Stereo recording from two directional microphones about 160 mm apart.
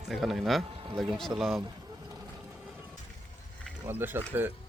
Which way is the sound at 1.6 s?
20° right (ahead or behind).